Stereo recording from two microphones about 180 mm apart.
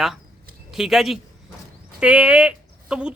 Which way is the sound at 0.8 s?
Centre (ahead or behind).